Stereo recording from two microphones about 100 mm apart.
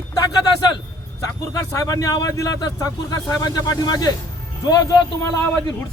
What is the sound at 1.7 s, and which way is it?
A man's voice, 35° left (ahead or behind).